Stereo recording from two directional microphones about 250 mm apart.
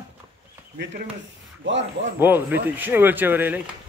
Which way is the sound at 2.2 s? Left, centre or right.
Centre.